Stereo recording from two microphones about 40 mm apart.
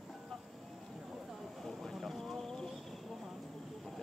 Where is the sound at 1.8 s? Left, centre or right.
Centre.